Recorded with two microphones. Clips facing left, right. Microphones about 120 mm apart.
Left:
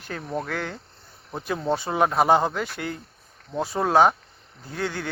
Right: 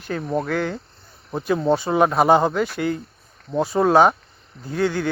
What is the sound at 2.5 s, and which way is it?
Speech, 5° right (ahead or behind).